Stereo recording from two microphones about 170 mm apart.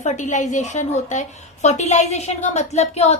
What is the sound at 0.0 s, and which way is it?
A woman's voice, 45° left (ahead or behind).